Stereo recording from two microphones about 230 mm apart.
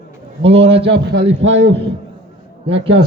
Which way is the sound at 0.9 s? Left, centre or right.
Right.